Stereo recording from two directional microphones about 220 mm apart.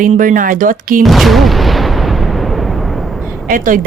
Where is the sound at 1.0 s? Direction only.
Centre (ahead or behind).